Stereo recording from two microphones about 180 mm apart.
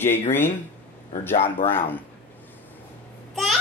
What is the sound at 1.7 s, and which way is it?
Speech, 10° left (ahead or behind).